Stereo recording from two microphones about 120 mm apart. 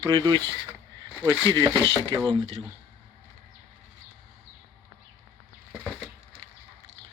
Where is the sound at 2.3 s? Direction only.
45° right (ahead or behind).